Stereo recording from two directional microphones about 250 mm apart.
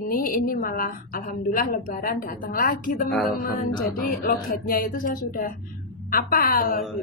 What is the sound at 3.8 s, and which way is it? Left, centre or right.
Speech, left.